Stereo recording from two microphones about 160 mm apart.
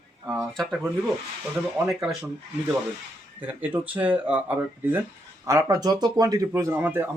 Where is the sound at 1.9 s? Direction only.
Centre (ahead or behind).